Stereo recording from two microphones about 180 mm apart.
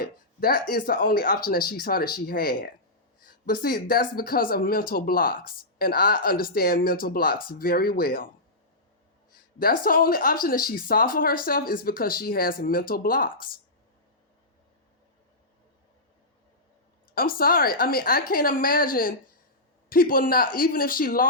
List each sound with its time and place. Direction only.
0.0 s speech: 55° left (ahead or behind)
9.3 s speech: 55° left (ahead or behind)
17.2 s speech: 55° left (ahead or behind)